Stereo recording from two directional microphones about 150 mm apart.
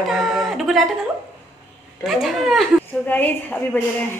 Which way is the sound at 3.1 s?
10° left (ahead or behind).